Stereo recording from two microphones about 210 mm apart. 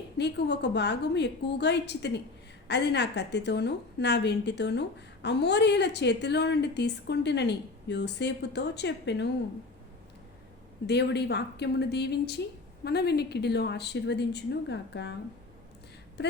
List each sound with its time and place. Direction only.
0.2 s a woman's voice: 55° left (ahead or behind)
10.8 s a woman's voice: 50° left (ahead or behind)